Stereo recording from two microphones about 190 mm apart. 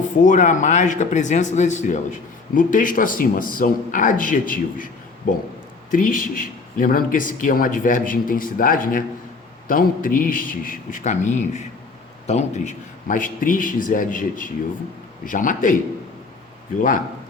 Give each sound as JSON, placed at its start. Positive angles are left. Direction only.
{"t": 0.2, "sound": "speech", "side_deg": 40}